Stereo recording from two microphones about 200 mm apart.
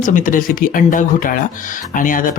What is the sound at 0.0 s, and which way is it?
Speech, 40° left (ahead or behind).